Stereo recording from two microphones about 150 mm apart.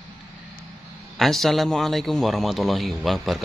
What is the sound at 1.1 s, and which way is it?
A man's voice, centre (ahead or behind).